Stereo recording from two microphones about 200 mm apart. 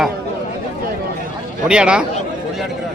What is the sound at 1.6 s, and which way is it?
Speech, 5° right (ahead or behind).